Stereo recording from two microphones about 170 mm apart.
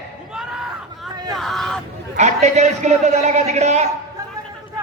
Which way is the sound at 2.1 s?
40° right (ahead or behind).